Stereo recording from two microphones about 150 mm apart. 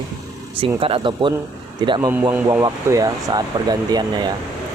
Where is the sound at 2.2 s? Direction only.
15° right (ahead or behind).